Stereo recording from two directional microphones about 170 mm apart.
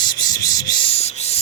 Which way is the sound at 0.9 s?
40° left (ahead or behind).